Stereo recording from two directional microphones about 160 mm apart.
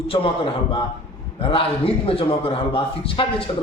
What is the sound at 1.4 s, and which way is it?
A man's voice, 35° left (ahead or behind).